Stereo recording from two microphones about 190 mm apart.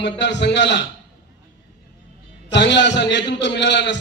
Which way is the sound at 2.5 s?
65° left (ahead or behind).